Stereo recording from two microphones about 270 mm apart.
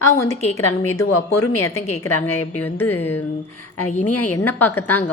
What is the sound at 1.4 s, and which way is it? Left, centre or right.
A woman's voice, centre.